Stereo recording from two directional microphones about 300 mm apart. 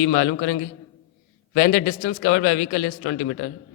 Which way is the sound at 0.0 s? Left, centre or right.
Left.